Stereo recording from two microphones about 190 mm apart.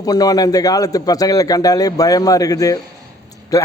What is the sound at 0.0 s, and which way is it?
A man's voice, 20° left (ahead or behind).